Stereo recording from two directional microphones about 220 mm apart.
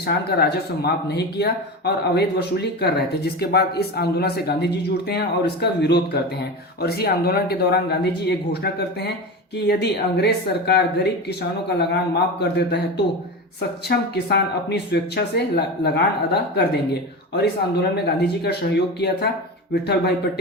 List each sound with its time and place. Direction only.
0.0 s speech: 45° left (ahead or behind)
12.4 s speech: 50° left (ahead or behind)